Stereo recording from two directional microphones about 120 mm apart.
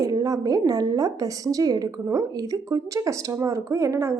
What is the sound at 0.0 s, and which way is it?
A woman's voice, 30° right (ahead or behind).